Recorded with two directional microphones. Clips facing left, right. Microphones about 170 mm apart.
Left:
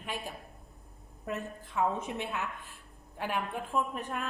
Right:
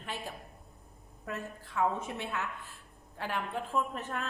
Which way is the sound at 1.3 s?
20° left (ahead or behind).